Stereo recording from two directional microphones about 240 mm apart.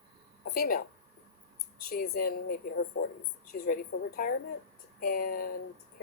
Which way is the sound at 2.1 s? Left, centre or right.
Left.